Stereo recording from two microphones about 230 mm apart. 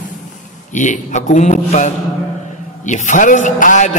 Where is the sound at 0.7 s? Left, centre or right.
Left.